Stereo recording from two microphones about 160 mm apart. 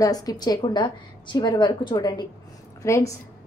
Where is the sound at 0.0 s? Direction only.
25° left (ahead or behind).